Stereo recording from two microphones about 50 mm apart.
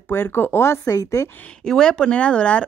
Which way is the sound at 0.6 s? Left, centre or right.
Left.